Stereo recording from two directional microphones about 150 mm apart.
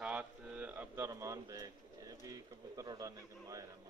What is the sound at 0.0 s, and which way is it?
Bird, 5° right (ahead or behind).